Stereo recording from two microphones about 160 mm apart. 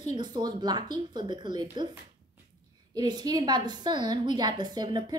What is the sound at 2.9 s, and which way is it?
A woman's voice, 25° right (ahead or behind).